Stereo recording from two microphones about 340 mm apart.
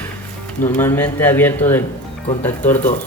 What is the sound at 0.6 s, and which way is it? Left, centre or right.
Speech, centre.